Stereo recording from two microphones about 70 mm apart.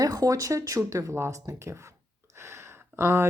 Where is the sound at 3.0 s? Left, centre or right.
Right.